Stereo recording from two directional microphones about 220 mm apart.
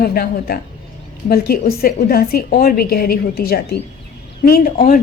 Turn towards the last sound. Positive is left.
turn(degrees=40)  # may be behind; listen again after turning